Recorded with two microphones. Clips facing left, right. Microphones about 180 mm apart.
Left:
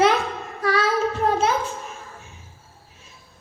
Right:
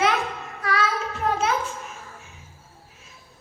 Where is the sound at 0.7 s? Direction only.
40° left (ahead or behind).